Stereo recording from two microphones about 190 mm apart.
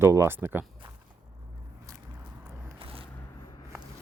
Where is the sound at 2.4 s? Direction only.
30° right (ahead or behind).